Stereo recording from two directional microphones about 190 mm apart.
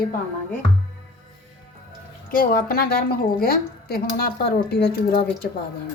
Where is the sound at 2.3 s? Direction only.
50° left (ahead or behind).